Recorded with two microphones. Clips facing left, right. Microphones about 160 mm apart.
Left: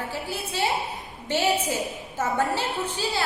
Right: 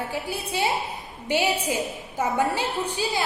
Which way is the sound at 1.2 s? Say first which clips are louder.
Even; 15° right (ahead or behind).